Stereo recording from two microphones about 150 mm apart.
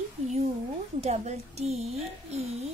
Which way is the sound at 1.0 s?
50° right (ahead or behind).